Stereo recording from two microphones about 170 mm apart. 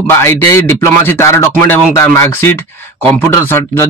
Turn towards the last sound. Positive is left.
turn(degrees=15)  # may be behind; listen again after turning